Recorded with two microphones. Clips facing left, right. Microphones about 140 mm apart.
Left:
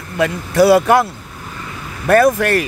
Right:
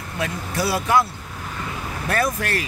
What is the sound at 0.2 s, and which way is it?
Speech, 80° left.